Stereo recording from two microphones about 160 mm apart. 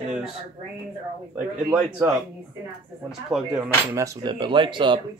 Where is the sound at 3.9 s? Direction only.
25° right (ahead or behind).